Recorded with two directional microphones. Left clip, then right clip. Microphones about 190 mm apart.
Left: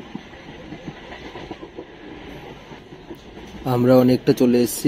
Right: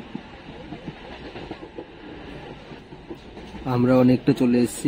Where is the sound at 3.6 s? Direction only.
25° left (ahead or behind).